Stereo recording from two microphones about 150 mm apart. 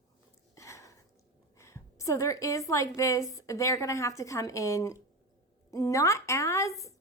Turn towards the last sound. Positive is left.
turn(degrees=20)  # may be behind; listen again after turning